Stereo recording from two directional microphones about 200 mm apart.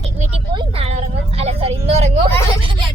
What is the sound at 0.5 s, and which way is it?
Vehicle, 30° right (ahead or behind).